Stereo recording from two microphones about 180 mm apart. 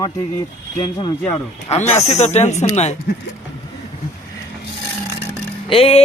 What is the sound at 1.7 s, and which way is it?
Speech, 35° left (ahead or behind).